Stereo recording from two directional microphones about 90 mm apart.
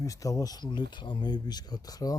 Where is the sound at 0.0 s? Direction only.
40° left (ahead or behind).